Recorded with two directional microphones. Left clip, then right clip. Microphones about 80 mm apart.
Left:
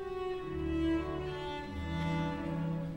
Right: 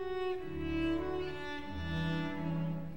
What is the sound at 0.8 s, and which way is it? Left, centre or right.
Cello, right.